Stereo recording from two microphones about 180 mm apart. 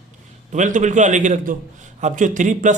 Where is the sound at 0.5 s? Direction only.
45° right (ahead or behind).